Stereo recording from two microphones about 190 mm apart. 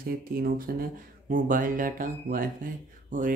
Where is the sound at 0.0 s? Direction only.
50° right (ahead or behind).